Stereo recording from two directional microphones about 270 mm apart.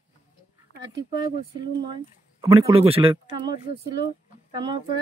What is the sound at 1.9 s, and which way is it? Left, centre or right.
Speech, centre.